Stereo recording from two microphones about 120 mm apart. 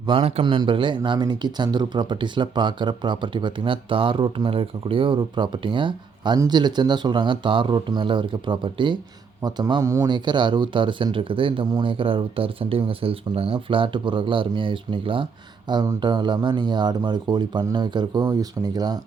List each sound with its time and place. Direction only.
0.0 s speech: 45° right (ahead or behind)
9.8 s speech: 25° right (ahead or behind)
10.1 s speech: 40° right (ahead or behind)
15.7 s speech: 35° right (ahead or behind)